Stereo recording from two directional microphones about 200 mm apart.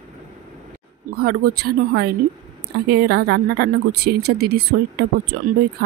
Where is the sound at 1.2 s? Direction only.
50° right (ahead or behind).